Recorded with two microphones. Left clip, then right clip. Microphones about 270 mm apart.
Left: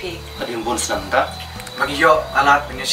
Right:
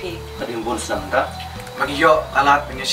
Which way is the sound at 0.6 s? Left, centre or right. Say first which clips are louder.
Left 2 dB; right.